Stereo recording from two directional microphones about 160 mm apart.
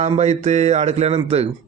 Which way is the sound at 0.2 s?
45° right (ahead or behind).